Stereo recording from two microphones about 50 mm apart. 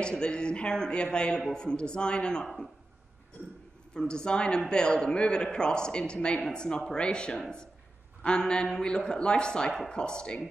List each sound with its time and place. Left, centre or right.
0.0 s speech: centre
2.4 s speech: centre
3.9 s speech: centre